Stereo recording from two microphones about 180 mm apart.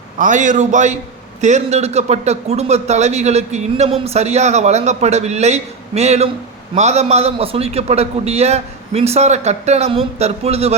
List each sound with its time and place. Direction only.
0.2 s a man's voice: 45° right (ahead or behind)